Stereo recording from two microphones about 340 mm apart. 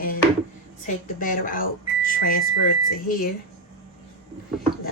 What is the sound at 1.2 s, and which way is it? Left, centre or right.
Speech, left.